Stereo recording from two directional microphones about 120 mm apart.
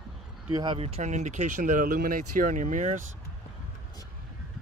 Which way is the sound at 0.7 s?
55° right (ahead or behind).